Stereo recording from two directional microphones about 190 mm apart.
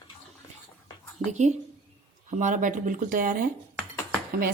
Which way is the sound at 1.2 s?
40° right (ahead or behind).